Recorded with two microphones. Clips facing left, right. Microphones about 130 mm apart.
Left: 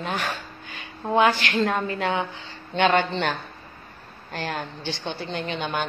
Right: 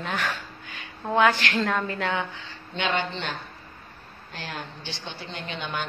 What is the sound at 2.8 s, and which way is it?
A woman's voice, 55° left (ahead or behind).